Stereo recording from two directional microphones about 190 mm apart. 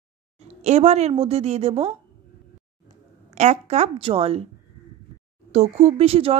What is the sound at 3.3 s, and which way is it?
Speech, 35° right (ahead or behind).